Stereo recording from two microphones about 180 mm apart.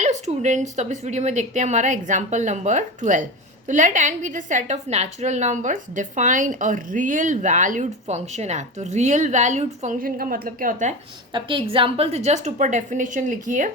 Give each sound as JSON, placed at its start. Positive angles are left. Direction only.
{"t": 0.0, "sound": "a woman's voice", "side_deg": -40}
{"t": 11.3, "sound": "a woman's voice", "side_deg": -25}